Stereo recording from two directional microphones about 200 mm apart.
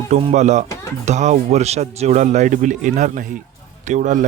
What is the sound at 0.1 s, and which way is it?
A man's voice, 35° right (ahead or behind).